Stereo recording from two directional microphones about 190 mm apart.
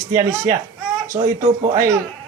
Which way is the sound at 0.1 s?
15° right (ahead or behind).